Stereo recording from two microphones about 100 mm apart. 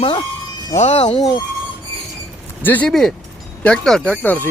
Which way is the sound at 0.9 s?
90° left.